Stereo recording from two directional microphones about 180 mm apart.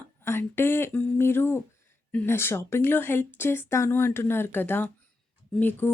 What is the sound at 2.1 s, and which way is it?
Speech, 10° left (ahead or behind).